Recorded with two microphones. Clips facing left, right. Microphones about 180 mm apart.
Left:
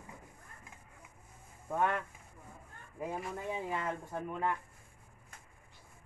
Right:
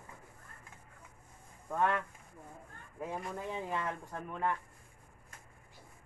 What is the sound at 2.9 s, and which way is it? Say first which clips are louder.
Speech: left 1 dB; 5° left (ahead or behind).